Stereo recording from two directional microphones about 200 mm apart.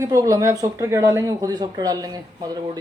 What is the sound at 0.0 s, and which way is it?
Speech, 15° right (ahead or behind).